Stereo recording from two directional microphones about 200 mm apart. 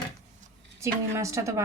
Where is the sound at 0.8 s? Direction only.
15° right (ahead or behind).